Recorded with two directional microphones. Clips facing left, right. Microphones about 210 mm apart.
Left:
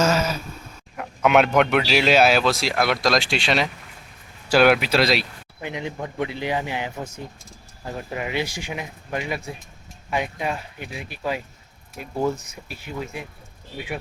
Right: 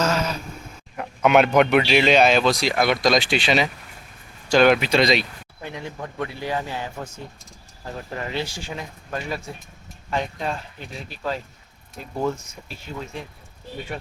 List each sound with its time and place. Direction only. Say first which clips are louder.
0.0 s a sound: left 2 dB; 5° left (ahead or behind)
0.9 s speech: right 1 dB; centre (ahead or behind)
5.6 s speech: left 3 dB; 15° left (ahead or behind)
8.1 s speech: left 2 dB; 15° left (ahead or behind)